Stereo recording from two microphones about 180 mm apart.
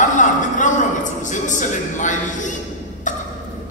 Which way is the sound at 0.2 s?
45° left (ahead or behind).